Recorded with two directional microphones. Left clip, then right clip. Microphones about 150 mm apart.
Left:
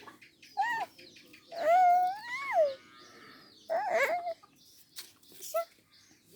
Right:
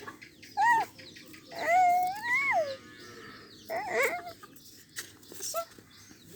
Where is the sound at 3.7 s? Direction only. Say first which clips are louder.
Left 1 dB; 20° left (ahead or behind).